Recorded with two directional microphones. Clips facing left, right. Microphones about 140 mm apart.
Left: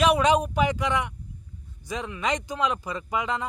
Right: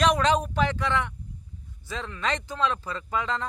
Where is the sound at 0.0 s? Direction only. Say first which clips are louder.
Left 2 dB; 10° left (ahead or behind).